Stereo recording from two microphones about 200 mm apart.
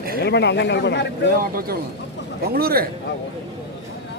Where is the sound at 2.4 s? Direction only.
50° right (ahead or behind).